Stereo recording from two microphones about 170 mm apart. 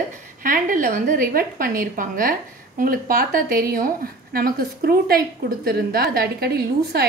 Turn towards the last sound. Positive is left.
turn(degrees=-65)  # may be behind; listen again after turning